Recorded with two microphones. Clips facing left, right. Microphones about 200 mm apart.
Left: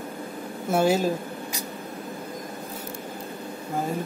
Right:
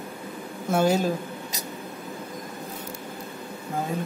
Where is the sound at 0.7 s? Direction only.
5° left (ahead or behind).